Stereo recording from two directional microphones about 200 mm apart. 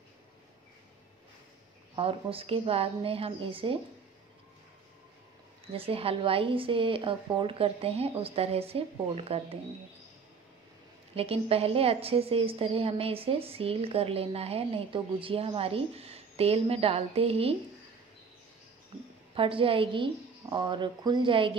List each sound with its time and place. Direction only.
2.0 s a woman's voice: 25° right (ahead or behind)
5.7 s a woman's voice: 30° right (ahead or behind)
11.1 s a woman's voice: 30° right (ahead or behind)
19.3 s a woman's voice: 25° right (ahead or behind)